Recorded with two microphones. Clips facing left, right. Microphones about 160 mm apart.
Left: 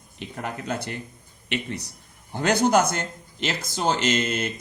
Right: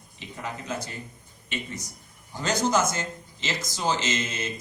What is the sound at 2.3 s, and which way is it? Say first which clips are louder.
Speech: left 5 dB; 60° left (ahead or behind).